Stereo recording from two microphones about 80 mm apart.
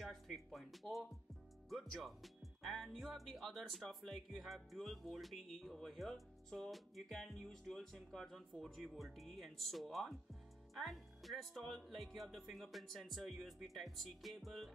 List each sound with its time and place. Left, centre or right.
0.0 s speech: centre